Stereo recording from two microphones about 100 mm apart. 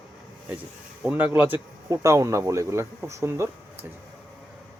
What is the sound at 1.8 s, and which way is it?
Speech, 30° right (ahead or behind).